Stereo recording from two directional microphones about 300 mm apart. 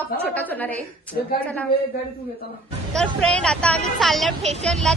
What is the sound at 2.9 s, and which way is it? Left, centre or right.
A woman's voice, centre.